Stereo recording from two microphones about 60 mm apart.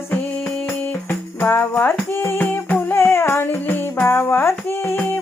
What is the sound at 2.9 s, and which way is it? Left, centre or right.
Music, left.